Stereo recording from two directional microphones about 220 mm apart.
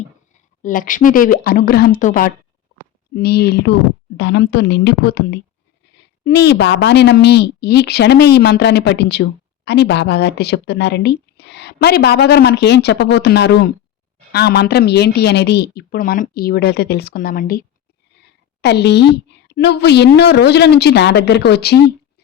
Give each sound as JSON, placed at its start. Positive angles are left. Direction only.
{"t": 0.6, "sound": "speech", "side_deg": 35}
{"t": 3.2, "sound": "a woman's voice", "side_deg": 45}
{"t": 18.2, "sound": "a sound", "side_deg": 50}
{"t": 19.5, "sound": "a woman's voice", "side_deg": 50}